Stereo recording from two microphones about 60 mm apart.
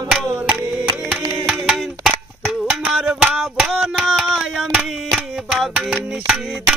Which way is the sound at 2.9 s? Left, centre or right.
Centre.